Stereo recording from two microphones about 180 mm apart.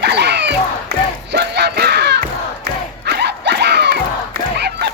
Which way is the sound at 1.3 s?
65° right (ahead or behind).